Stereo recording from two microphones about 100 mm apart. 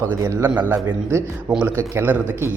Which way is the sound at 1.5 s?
20° right (ahead or behind).